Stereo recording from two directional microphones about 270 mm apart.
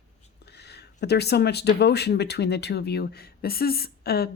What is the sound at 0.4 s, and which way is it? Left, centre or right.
Speech, left.